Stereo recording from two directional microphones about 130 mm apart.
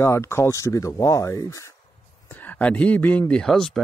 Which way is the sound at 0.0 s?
20° left (ahead or behind).